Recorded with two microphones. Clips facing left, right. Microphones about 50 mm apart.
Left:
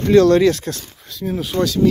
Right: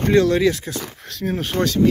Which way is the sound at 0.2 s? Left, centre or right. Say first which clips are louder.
Left 4 dB; centre.